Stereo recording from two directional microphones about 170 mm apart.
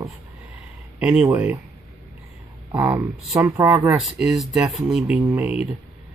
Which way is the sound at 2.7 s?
10° right (ahead or behind).